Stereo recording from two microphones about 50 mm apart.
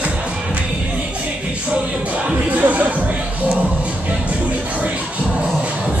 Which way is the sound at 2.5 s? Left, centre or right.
Right.